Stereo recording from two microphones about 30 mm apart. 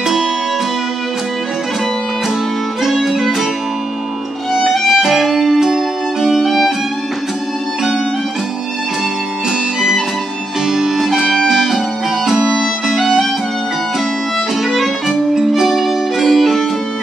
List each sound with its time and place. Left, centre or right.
0.0 s music: centre
4.8 s music: centre
12.4 s music: centre
14.6 s music: centre
15.3 s music: centre